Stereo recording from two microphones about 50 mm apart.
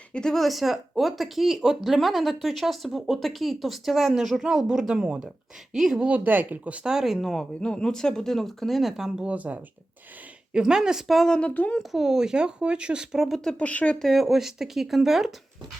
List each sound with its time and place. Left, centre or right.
0.1 s speech: centre
0.3 s speech: centre
6.0 s speech: right
6.2 s speech: right
6.8 s speech: centre
7.6 s speech: centre
9.3 s speech: right
10.5 s speech: centre
11.3 s speech: left
11.8 s speech: centre
13.3 s speech: centre
13.6 s speech: left
14.0 s speech: centre